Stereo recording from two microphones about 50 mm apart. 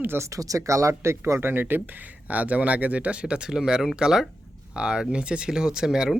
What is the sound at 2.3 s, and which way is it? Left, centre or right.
Speech, right.